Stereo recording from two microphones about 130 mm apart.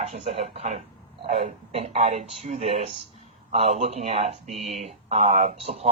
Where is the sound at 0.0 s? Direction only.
60° right (ahead or behind).